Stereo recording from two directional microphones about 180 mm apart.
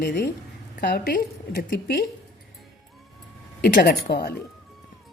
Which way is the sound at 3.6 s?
60° left (ahead or behind).